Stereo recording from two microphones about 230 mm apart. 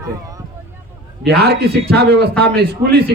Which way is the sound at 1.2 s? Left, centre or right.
Right.